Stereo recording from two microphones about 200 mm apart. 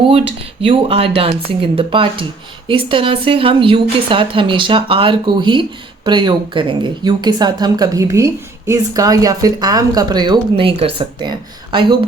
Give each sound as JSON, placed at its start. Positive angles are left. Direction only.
{"t": 0.6, "sound": "speech", "side_deg": -30}